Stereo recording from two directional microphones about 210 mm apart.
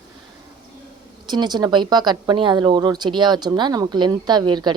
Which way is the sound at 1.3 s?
20° right (ahead or behind).